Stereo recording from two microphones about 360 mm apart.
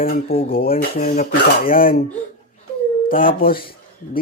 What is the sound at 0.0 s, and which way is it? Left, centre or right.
Speech, centre.